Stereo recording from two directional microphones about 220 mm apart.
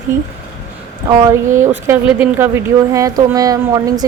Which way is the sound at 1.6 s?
10° right (ahead or behind).